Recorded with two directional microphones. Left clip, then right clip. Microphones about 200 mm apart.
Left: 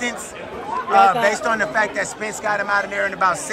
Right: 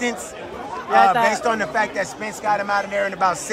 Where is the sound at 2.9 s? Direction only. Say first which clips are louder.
Even; 30° right (ahead or behind).